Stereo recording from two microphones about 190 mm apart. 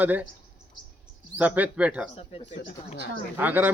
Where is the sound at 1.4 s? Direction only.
10° right (ahead or behind).